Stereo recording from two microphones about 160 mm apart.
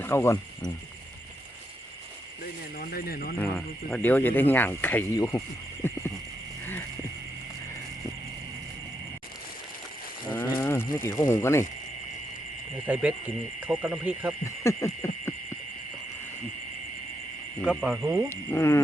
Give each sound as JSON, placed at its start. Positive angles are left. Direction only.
{"t": 0.0, "sound": "speech", "side_deg": 15}
{"t": 2.7, "sound": "speech", "side_deg": 65}
{"t": 3.4, "sound": "speech", "side_deg": 10}
{"t": 5.8, "sound": "frog", "side_deg": 15}
{"t": 10.3, "sound": "livestock", "side_deg": 15}
{"t": 12.9, "sound": "speech", "side_deg": -10}
{"t": 14.4, "sound": "speech", "side_deg": 15}
{"t": 17.6, "sound": "speech", "side_deg": -5}
{"t": 18.3, "sound": "speech", "side_deg": 15}